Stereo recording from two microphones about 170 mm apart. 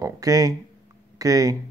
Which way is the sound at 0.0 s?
20° right (ahead or behind).